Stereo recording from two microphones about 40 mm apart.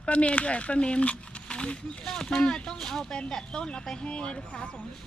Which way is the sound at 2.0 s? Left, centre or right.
Centre.